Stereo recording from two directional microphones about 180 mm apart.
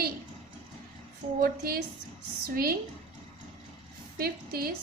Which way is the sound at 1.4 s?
55° right (ahead or behind).